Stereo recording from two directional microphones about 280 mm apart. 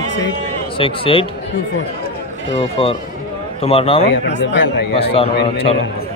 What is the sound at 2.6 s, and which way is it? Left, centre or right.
Speech, centre.